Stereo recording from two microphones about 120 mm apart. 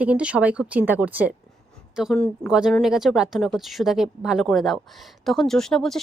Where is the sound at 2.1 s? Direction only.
10° left (ahead or behind).